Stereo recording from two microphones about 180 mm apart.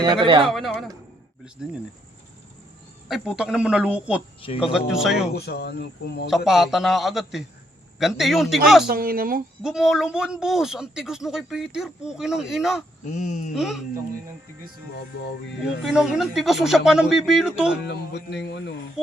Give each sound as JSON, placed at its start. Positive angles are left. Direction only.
{"t": 0.0, "sound": "speech", "side_deg": -25}
{"t": 0.4, "sound": "speech", "side_deg": 0}
{"t": 3.1, "sound": "speech", "side_deg": -5}
{"t": 5.3, "sound": "speech", "side_deg": 65}
{"t": 6.3, "sound": "speech", "side_deg": 0}
{"t": 8.9, "sound": "speech", "side_deg": -55}
{"t": 9.6, "sound": "speech", "side_deg": -5}
{"t": 13.1, "sound": "speech", "side_deg": 40}
{"t": 13.5, "sound": "speech", "side_deg": 0}
{"t": 15.8, "sound": "speech", "side_deg": 0}
{"t": 17.8, "sound": "music", "side_deg": 70}